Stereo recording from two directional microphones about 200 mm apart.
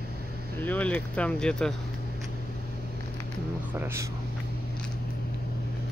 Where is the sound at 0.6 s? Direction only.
10° left (ahead or behind).